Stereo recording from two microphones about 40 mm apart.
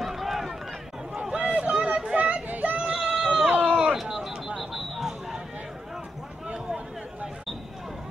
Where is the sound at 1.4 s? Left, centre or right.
Right.